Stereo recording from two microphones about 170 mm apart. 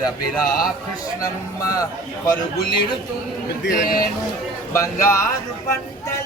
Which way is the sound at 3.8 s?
55° left (ahead or behind).